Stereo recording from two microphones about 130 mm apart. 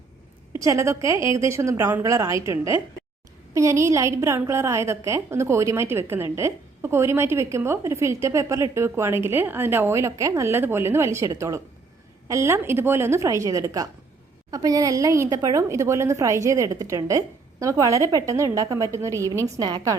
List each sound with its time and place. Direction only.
0.6 s a woman's voice: 25° right (ahead or behind)